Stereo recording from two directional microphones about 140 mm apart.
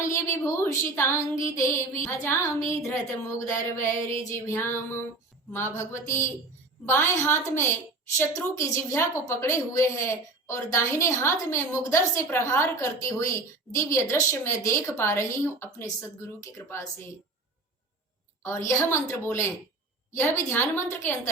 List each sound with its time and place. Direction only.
0.0 s a woman's voice: 20° left (ahead or behind)
18.4 s a woman's voice: 20° left (ahead or behind)